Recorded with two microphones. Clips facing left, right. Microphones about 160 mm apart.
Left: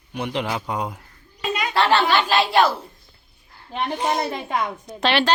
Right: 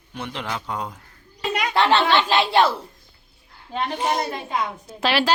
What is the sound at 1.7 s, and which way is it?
Speech, 20° right (ahead or behind).